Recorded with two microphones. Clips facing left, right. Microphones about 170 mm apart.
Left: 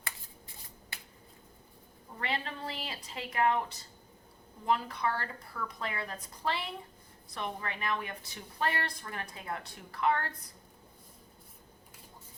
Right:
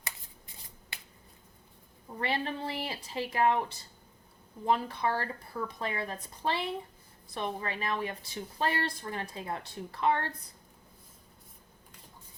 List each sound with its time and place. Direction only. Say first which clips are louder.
2.1 s a woman's voice: right 4 dB; 30° right (ahead or behind)